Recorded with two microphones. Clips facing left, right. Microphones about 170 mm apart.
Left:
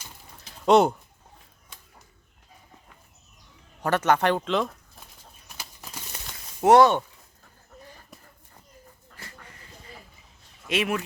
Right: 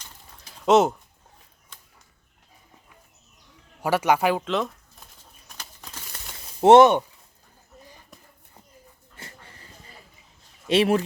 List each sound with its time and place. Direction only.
0.6 s speech: centre (ahead or behind)
3.8 s speech: 10° right (ahead or behind)
5.5 s a sound: 5° left (ahead or behind)
6.6 s speech: 25° right (ahead or behind)
9.1 s a sound: 30° right (ahead or behind)
10.7 s speech: 30° right (ahead or behind)